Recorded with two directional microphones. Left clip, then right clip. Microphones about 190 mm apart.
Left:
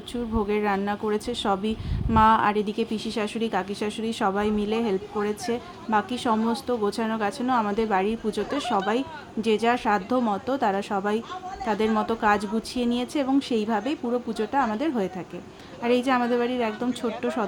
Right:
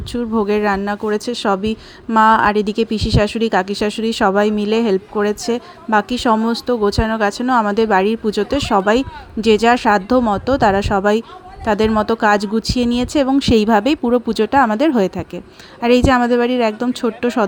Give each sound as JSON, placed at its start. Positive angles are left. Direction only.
{"t": 0.1, "sound": "a woman's voice", "side_deg": -40}